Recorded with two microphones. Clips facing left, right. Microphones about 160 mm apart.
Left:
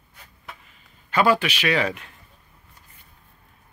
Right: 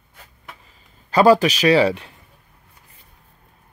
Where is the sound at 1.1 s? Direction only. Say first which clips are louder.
Right 7 dB; 35° right (ahead or behind).